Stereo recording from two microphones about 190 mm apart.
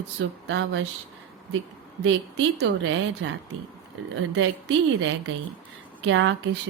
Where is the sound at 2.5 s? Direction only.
80° right.